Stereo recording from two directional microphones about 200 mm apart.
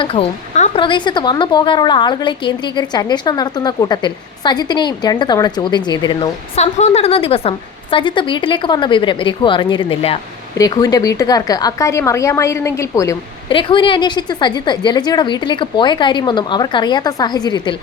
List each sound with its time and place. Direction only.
0.0 s a woman's voice: 25° left (ahead or behind)
6.6 s a woman's voice: 35° left (ahead or behind)